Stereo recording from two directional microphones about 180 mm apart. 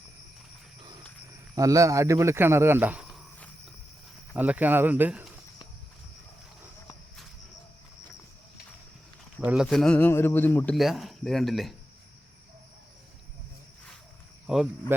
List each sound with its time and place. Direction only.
1.5 s speech: 20° right (ahead or behind)
4.4 s speech: 10° right (ahead or behind)
9.4 s a man's voice: 5° right (ahead or behind); by 10.8 s 10° left (ahead or behind)
10.8 s speech: centre (ahead or behind)
14.4 s speech: 5° right (ahead or behind)